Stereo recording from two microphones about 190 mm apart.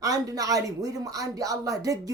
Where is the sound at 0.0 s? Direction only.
20° right (ahead or behind).